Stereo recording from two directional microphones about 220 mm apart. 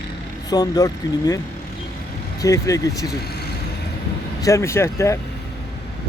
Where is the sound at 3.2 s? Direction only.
45° left (ahead or behind).